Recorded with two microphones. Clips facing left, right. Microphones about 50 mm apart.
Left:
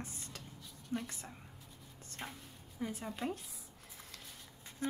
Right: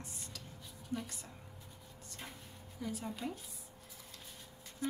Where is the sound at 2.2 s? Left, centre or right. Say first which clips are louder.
Left 4 dB; left.